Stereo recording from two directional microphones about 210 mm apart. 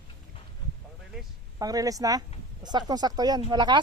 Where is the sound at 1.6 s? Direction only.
15° right (ahead or behind).